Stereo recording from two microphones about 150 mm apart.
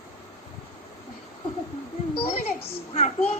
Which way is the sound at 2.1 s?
40° left (ahead or behind).